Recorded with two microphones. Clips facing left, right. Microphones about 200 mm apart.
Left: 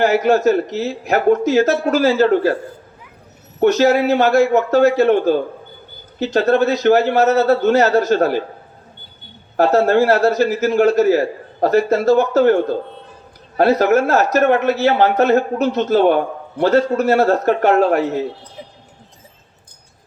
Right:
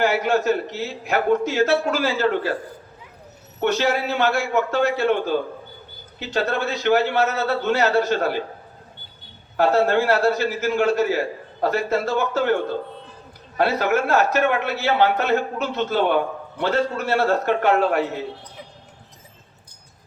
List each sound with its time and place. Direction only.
0.0 s a man's voice: 40° left (ahead or behind)
3.6 s a man's voice: 40° left (ahead or behind)
9.6 s a man's voice: 40° left (ahead or behind)
13.6 s a man's voice: 40° left (ahead or behind)